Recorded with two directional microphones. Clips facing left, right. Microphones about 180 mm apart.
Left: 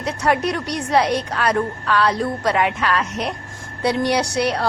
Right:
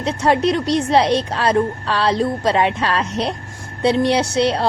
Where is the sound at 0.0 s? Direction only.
25° right (ahead or behind).